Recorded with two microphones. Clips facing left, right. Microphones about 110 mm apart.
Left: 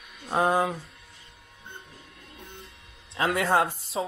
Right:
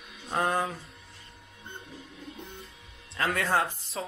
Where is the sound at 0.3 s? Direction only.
10° left (ahead or behind).